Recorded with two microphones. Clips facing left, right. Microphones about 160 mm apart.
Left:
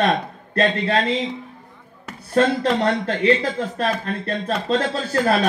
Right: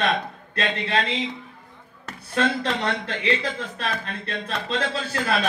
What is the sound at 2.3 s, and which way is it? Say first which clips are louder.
A man's voice: left 6 dB; 40° left (ahead or behind).